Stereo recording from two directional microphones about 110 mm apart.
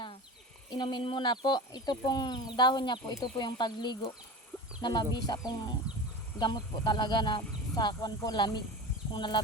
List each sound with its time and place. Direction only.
0.8 s speech: 45° left (ahead or behind)